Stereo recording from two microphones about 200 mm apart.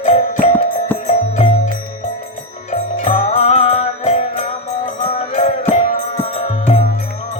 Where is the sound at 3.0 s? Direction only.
30° left (ahead or behind).